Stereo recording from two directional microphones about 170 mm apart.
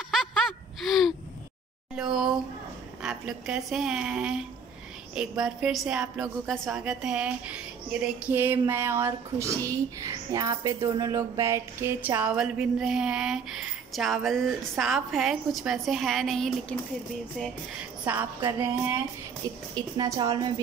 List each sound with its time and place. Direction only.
0.1 s gasp: centre (ahead or behind)
2.0 s a sound: centre (ahead or behind)
3.0 s a woman's voice: 5° right (ahead or behind)
18.0 s music: 10° right (ahead or behind)
19.7 s a woman's voice: 25° right (ahead or behind)